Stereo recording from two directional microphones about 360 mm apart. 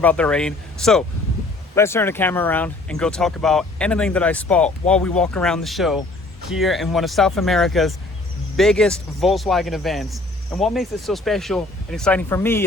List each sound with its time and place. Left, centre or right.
0.0 s speech: centre